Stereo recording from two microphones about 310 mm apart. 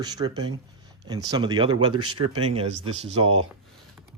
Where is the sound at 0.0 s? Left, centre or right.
Centre.